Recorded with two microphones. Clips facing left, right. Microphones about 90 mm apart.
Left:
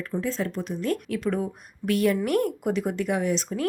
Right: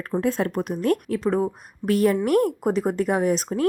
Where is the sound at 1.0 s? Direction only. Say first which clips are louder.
Right 4 dB; 35° right (ahead or behind).